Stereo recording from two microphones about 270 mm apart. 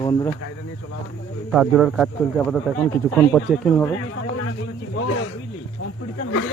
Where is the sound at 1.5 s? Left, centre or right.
Centre.